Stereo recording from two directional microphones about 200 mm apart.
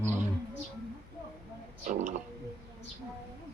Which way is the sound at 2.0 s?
35° right (ahead or behind).